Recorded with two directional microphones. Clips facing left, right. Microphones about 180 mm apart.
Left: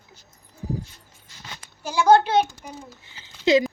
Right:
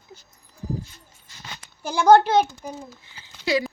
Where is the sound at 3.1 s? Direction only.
20° left (ahead or behind).